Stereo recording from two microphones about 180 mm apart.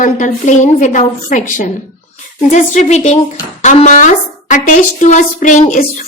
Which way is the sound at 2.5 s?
40° left (ahead or behind).